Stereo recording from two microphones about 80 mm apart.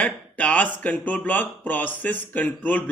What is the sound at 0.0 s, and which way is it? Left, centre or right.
A man's voice, centre.